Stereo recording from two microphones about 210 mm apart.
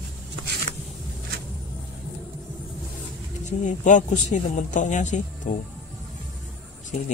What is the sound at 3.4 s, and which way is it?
Speech, 35° left (ahead or behind).